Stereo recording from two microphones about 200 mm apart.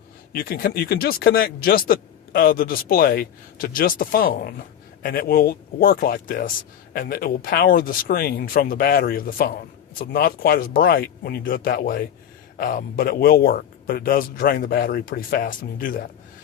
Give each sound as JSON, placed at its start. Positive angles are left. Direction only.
{"t": 0.3, "sound": "speech", "side_deg": 50}